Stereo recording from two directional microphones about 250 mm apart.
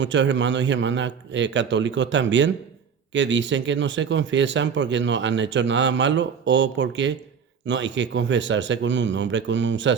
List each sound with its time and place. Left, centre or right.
0.0 s speech: right